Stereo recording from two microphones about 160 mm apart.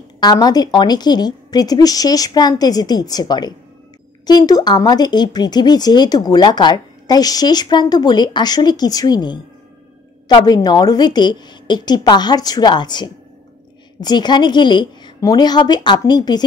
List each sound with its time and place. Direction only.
0.2 s speech: 25° left (ahead or behind)